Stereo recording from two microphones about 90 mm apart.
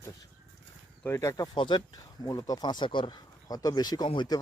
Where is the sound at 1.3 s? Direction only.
45° left (ahead or behind); by 3.2 s 65° left (ahead or behind).